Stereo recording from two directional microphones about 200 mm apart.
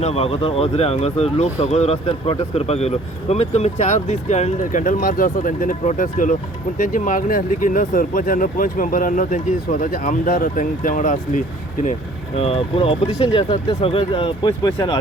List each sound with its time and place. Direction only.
0.0 s speech: 30° left (ahead or behind)
12.4 s speech: 30° left (ahead or behind)